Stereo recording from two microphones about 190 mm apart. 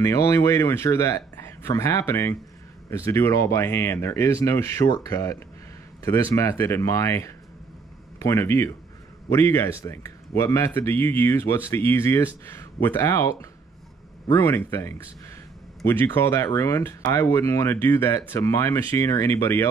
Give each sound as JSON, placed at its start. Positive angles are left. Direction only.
{"t": 0.0, "sound": "speech", "side_deg": 15}